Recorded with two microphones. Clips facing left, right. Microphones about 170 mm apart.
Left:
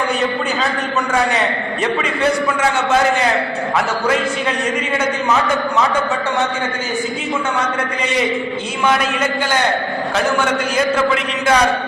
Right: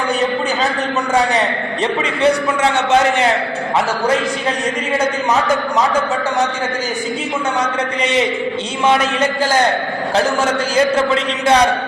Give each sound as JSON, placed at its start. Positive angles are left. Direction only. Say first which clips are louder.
{"t": 8.9, "sound": "a man's voice", "louder": "right 3 dB", "side_deg": -30}